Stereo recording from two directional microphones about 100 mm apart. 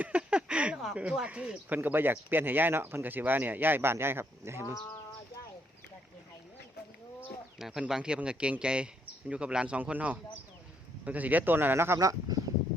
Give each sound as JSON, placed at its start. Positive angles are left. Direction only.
{"t": 0.0, "sound": "speech", "side_deg": -10}
{"t": 7.6, "sound": "speech", "side_deg": -5}
{"t": 11.9, "sound": "speech", "side_deg": -35}